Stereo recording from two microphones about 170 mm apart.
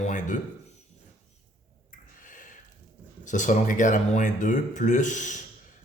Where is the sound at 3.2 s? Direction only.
45° left (ahead or behind).